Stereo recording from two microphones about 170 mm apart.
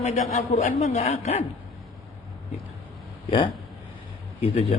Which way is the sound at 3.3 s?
30° left (ahead or behind).